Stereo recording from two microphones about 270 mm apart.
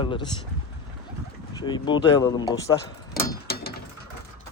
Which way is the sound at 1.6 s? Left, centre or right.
Centre.